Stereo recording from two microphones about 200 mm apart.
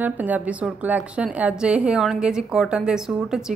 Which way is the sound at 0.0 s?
10° right (ahead or behind).